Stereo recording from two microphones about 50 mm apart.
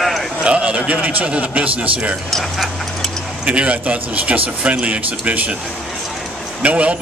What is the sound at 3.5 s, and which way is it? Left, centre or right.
Speech, right.